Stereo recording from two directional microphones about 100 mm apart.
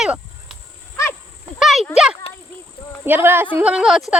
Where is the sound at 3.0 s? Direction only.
20° right (ahead or behind).